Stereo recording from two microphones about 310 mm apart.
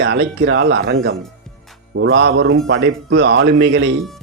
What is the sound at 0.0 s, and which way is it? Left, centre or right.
Speech, right.